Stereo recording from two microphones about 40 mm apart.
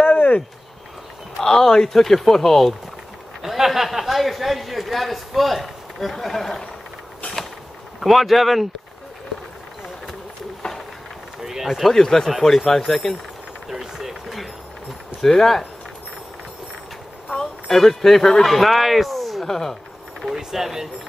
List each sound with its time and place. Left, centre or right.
0.0 s a sound: left
1.4 s speech: centre
3.4 s speech: centre
8.0 s speech: centre
11.4 s a sound: centre
11.9 s speech: centre
13.7 s run: centre
15.2 s speech: centre
17.6 s speech: centre
20.2 s speech: centre